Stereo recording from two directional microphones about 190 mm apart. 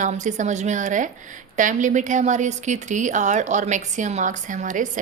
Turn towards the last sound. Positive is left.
turn(degrees=-40)  # may be behind; listen again after turning